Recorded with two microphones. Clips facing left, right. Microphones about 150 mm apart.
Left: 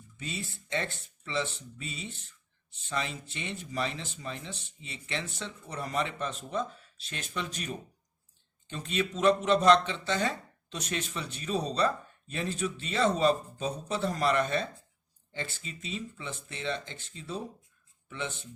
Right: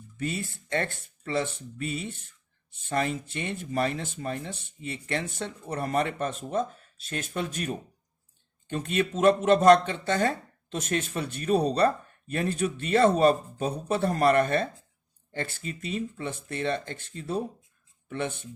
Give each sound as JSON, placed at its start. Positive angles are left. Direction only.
{"t": 0.2, "sound": "a man's voice", "side_deg": -55}